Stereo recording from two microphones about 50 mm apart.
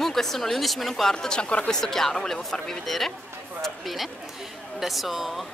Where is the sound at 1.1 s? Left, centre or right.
Centre.